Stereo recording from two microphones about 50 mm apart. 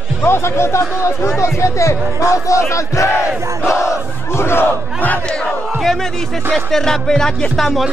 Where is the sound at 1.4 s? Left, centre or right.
Left.